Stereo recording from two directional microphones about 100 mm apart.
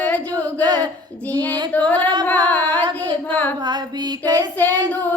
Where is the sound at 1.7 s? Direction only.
15° left (ahead or behind).